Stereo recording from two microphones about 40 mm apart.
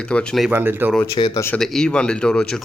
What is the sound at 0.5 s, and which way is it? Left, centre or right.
Speech, right.